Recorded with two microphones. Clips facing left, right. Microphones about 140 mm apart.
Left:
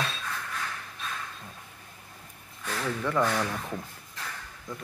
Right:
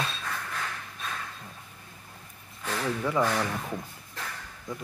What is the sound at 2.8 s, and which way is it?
Speech, 10° right (ahead or behind).